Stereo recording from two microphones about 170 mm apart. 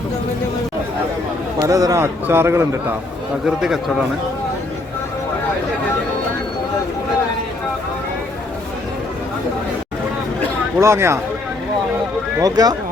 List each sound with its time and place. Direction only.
1.6 s a man's voice: 20° right (ahead or behind)
3.4 s a man's voice: centre (ahead or behind)
10.8 s a man's voice: 15° right (ahead or behind)
12.4 s speech: 25° right (ahead or behind)